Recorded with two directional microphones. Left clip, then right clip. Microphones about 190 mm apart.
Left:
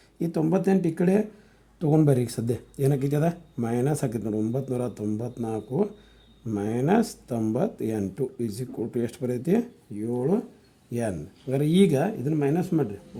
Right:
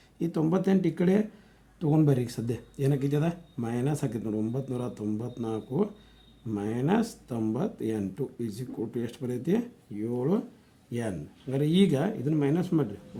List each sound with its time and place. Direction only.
0.2 s speech: 30° left (ahead or behind)